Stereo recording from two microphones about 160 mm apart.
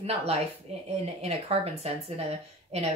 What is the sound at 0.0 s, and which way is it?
A woman's voice, 40° right (ahead or behind).